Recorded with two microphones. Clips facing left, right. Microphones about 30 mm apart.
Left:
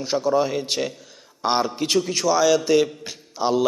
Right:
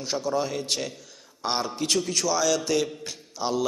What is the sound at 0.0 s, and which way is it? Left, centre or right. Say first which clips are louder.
A man's voice: left 6 dB; centre.